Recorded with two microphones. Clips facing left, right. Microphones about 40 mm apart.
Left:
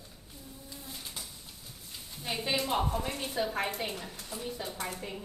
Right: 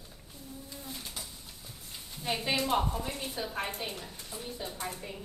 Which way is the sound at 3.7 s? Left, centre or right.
Left.